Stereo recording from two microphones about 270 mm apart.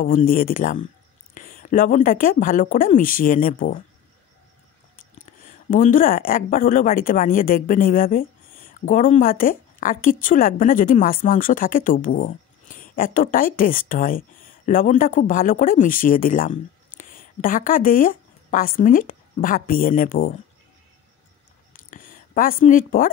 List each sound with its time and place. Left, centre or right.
0.0 s speech: left
4.9 s speech: left
21.7 s a sound: left